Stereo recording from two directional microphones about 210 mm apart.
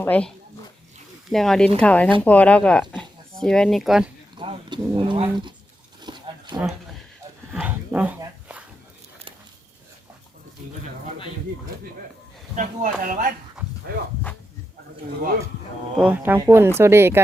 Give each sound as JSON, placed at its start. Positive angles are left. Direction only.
{"t": 0.0, "sound": "speech", "side_deg": 5}
{"t": 4.4, "sound": "speech", "side_deg": -20}
{"t": 6.0, "sound": "a sound", "side_deg": -20}
{"t": 6.5, "sound": "speech", "side_deg": -5}
{"t": 7.5, "sound": "dog", "side_deg": -5}
{"t": 12.5, "sound": "speech", "side_deg": -40}
{"t": 16.0, "sound": "speech", "side_deg": -10}